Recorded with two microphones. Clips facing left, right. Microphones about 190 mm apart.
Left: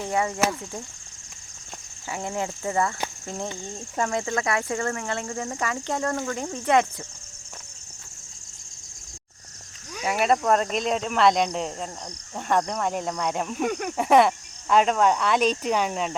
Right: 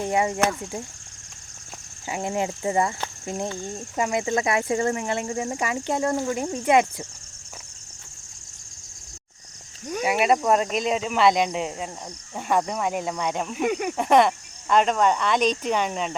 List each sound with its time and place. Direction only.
0.0 s speech: 20° right (ahead or behind)
2.0 s speech: 20° right (ahead or behind)
10.0 s speech: 5° right (ahead or behind)
14.0 s speech: 5° left (ahead or behind)